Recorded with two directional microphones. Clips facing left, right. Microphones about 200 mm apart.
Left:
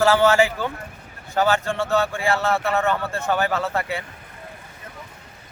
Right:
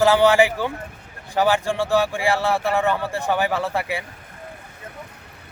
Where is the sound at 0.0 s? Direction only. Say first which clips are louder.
Right 1 dB; 15° right (ahead or behind).